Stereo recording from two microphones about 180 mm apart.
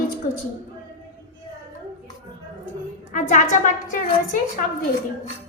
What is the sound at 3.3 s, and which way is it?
A woman's voice, 45° left (ahead or behind).